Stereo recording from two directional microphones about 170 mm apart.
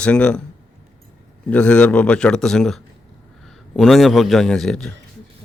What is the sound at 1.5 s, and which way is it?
Speech, 5° left (ahead or behind).